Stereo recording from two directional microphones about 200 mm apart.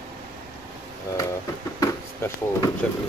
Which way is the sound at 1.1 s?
15° left (ahead or behind).